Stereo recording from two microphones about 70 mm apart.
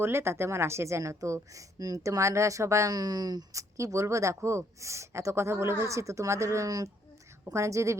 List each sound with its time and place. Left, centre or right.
0.0 s speech: right
2.9 s speech: right
6.7 s speech: right
7.4 s speech: right